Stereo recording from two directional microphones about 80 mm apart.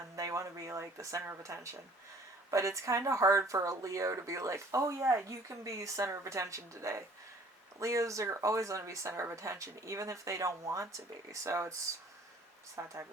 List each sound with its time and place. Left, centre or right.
0.2 s a sound: right
2.5 s speech: right
12.7 s speech: right